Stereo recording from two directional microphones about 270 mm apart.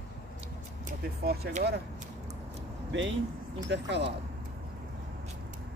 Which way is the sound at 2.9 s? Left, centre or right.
Right.